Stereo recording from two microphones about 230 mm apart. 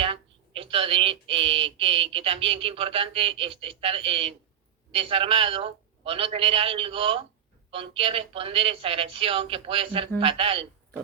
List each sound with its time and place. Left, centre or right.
0.0 s speech: right